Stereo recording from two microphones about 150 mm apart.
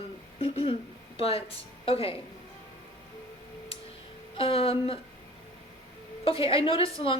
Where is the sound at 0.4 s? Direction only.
40° left (ahead or behind).